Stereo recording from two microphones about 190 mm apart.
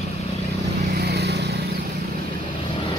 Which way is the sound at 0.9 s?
60° right (ahead or behind).